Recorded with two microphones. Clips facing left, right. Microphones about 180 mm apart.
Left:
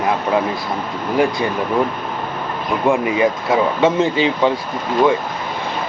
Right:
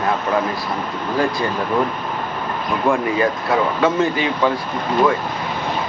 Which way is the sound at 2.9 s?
20° left (ahead or behind).